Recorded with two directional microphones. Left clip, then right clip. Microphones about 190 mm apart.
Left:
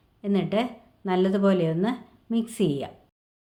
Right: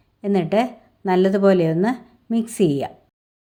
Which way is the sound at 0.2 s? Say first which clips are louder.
Right 7 dB; 35° right (ahead or behind).